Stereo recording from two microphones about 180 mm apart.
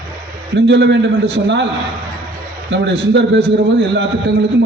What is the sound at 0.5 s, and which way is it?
A man's voice, 75° right (ahead or behind).